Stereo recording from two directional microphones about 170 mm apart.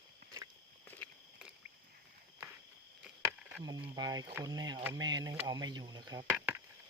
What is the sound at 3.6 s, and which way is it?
Speech, 25° right (ahead or behind).